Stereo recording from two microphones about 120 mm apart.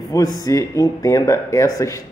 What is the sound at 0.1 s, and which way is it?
Speech, 30° left (ahead or behind).